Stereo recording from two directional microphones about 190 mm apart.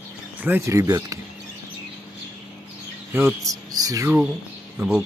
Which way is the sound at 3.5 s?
20° right (ahead or behind).